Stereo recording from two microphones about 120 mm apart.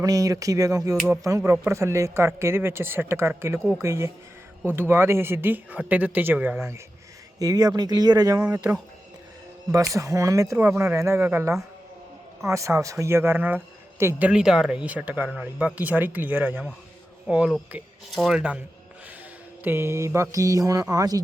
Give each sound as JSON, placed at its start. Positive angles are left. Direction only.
{"t": 0.0, "sound": "speech", "side_deg": -30}
{"t": 7.3, "sound": "speech", "side_deg": -30}
{"t": 9.7, "sound": "speech", "side_deg": -25}
{"t": 14.3, "sound": "speech", "side_deg": -5}
{"t": 19.6, "sound": "speech", "side_deg": -20}